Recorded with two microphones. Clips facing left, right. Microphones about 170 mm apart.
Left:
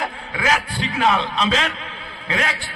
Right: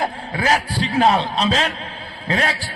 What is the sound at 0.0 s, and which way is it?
A man's voice, 35° right (ahead or behind).